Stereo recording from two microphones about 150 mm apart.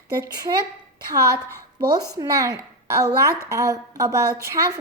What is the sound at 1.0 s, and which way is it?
A woman's voice, 25° right (ahead or behind).